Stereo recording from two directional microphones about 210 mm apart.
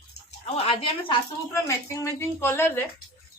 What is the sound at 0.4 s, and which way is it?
Speech, 30° left (ahead or behind).